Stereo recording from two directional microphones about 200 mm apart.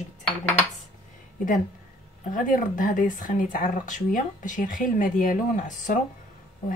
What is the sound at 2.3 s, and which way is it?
Speech, 40° left (ahead or behind).